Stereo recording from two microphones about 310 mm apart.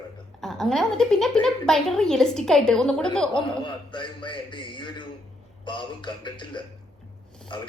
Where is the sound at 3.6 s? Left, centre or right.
Centre.